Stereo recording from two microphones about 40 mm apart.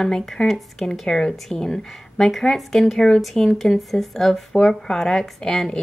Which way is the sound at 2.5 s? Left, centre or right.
Centre.